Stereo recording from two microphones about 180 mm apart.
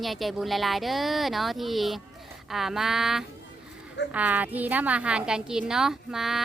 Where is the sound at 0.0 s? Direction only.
Centre (ahead or behind).